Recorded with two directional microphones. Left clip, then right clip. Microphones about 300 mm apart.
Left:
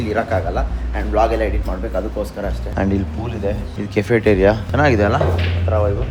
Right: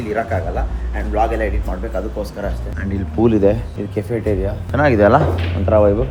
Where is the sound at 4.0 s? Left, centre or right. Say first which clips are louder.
Left 6 dB; centre.